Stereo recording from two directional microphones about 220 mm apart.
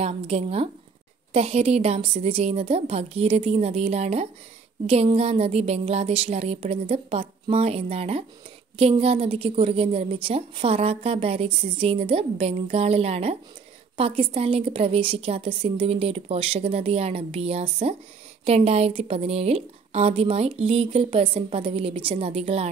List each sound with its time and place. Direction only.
0.0 s a woman's voice: 30° right (ahead or behind)